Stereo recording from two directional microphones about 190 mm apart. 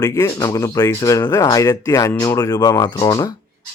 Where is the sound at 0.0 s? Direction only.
15° left (ahead or behind).